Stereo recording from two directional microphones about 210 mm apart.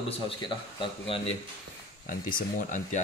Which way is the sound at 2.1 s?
40° left (ahead or behind).